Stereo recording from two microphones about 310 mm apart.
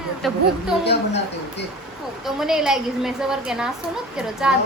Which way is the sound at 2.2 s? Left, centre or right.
Centre.